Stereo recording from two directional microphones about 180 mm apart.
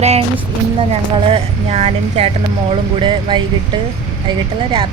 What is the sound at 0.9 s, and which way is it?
Speech, 35° right (ahead or behind).